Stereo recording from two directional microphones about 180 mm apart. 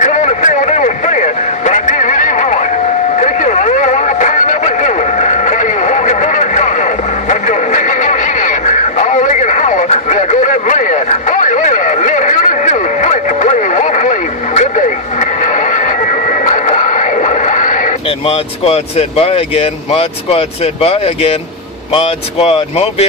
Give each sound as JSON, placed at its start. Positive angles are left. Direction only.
{"t": 0.0, "sound": "vehicle", "side_deg": 40}
{"t": 3.2, "sound": "music", "side_deg": 45}
{"t": 18.2, "sound": "speech", "side_deg": 35}